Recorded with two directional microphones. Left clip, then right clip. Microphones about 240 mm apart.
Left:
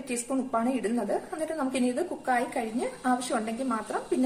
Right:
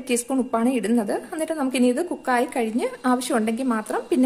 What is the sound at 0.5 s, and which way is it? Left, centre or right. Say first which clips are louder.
A woman's voice: right 5 dB; right.